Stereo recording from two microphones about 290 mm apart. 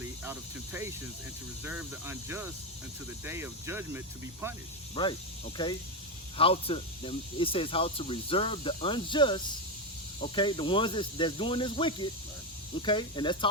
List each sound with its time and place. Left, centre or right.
0.0 s speech: centre
5.0 s speech: centre
6.3 s speech: centre